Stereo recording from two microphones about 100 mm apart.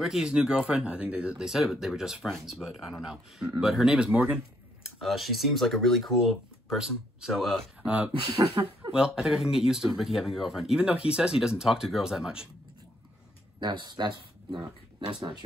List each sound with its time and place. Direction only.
0.0 s speech: 5° right (ahead or behind)
5.0 s speech: centre (ahead or behind)
8.6 s speech: 40° right (ahead or behind)
8.9 s speech: 10° right (ahead or behind)
13.6 s speech: 50° right (ahead or behind)